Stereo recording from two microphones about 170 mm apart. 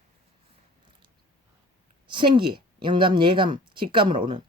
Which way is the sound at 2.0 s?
30° right (ahead or behind).